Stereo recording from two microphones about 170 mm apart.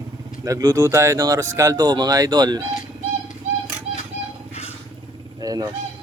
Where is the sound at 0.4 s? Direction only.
20° right (ahead or behind).